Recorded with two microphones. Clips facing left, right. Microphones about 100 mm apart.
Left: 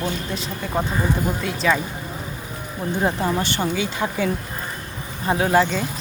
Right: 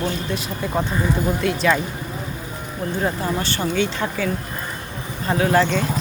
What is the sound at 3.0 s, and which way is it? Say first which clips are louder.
Speech: left 2 dB; 20° left (ahead or behind).